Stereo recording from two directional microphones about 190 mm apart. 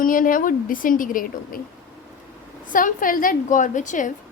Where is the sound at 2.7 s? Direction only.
45° left (ahead or behind).